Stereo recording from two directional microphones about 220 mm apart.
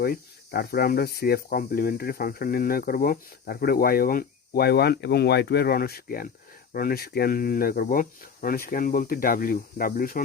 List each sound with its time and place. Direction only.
0.0 s speech: 45° left (ahead or behind)